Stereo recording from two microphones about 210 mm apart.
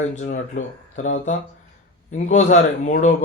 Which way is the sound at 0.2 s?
35° left (ahead or behind).